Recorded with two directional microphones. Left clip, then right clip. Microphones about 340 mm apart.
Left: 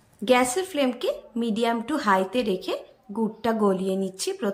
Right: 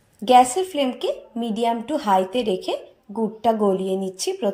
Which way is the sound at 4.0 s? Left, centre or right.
Centre.